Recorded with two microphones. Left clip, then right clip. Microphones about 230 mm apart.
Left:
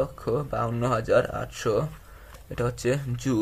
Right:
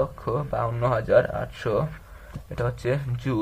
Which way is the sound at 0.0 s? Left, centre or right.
Left.